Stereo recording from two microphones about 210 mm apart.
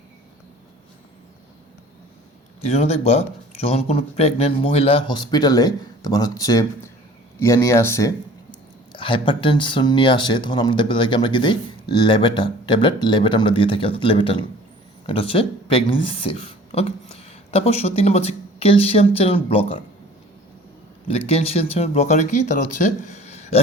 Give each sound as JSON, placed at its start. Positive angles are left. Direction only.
{"t": 2.6, "sound": "speech", "side_deg": 30}
{"t": 21.1, "sound": "speech", "side_deg": 30}